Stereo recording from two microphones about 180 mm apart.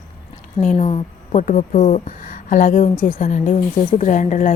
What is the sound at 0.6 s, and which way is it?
A woman's voice, 40° left (ahead or behind).